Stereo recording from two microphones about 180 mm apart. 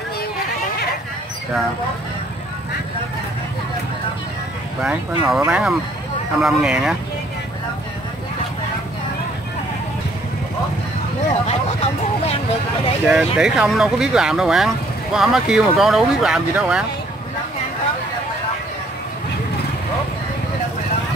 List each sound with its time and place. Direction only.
4.8 s speech: centre (ahead or behind)
11.2 s speech: 35° left (ahead or behind)
13.0 s speech: 5° right (ahead or behind)